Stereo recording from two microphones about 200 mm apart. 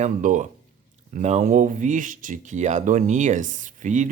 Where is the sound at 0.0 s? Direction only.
40° right (ahead or behind).